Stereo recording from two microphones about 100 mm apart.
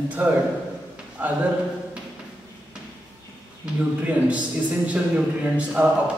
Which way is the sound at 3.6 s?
10° right (ahead or behind).